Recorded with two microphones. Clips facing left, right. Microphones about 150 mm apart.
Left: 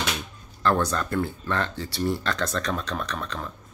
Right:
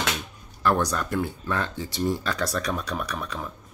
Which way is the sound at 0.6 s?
10° right (ahead or behind).